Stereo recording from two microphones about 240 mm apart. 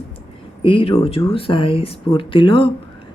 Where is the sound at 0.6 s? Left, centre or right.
Left.